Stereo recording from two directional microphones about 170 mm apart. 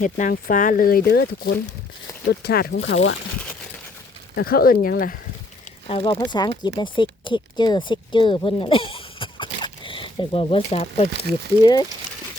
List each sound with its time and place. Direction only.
0.0 s speech: 50° left (ahead or behind); by 3.2 s 75° left (ahead or behind)
4.4 s speech: 60° left (ahead or behind)
5.9 s speech: 30° left (ahead or behind)
11.6 s speech: 25° left (ahead or behind)